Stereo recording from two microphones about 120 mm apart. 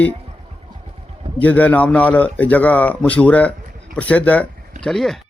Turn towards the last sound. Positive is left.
turn(degrees=0)  # may be behind; listen again after turning